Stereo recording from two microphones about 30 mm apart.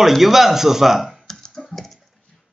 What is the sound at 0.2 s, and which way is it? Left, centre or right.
Speech, centre.